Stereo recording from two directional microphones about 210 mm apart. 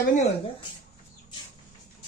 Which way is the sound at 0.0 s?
35° left (ahead or behind).